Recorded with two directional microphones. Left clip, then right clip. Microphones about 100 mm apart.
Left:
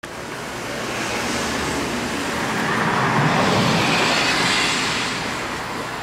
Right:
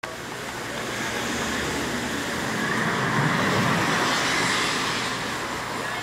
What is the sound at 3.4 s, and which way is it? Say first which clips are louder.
Vehicle: left 4 dB; 55° left (ahead or behind).